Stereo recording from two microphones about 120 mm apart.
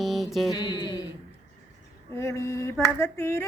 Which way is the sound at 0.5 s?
40° left (ahead or behind).